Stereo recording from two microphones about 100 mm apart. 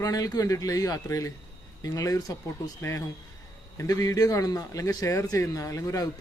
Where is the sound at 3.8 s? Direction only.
35° left (ahead or behind).